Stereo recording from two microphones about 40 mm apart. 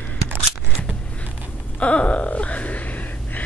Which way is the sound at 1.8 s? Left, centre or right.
Left.